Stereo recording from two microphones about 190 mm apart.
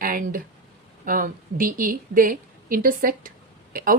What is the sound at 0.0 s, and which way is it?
A woman's voice, 50° right (ahead or behind).